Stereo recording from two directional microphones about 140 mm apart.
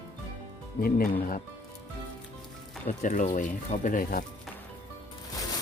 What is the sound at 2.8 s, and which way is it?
Speech, 65° left (ahead or behind).